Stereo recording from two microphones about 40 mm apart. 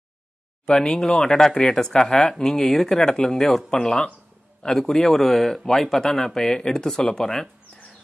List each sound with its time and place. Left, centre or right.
0.7 s speech: centre
5.2 s speech: centre